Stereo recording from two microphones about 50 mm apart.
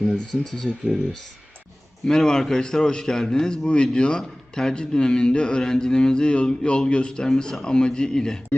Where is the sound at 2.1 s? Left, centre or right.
Centre.